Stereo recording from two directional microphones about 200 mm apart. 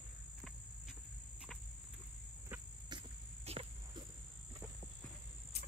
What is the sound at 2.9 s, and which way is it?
Vehicle, 30° right (ahead or behind).